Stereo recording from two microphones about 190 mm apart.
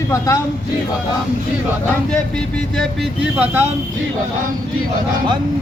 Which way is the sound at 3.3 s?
10° right (ahead or behind).